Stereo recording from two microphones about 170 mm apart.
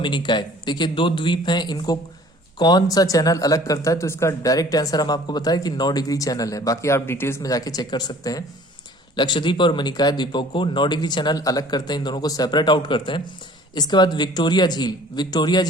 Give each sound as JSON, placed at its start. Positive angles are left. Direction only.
{"t": 0.0, "sound": "speech", "side_deg": 25}